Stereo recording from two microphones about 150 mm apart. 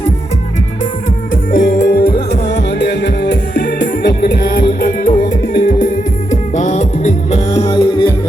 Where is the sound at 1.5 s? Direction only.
65° left (ahead or behind); by 4.6 s 90° left.